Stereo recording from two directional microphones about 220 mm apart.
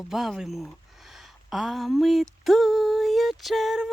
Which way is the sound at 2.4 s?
Centre (ahead or behind).